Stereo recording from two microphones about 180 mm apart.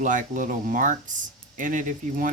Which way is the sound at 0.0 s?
45° right (ahead or behind).